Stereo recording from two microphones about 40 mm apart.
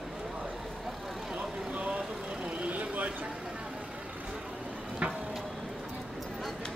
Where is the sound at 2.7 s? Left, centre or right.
Right.